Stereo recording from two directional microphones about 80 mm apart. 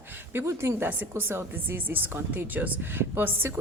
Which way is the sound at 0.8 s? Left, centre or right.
Right.